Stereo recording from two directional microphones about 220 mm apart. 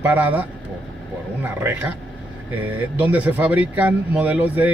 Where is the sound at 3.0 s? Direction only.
5° right (ahead or behind).